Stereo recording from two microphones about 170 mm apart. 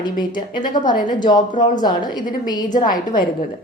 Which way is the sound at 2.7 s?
50° left (ahead or behind).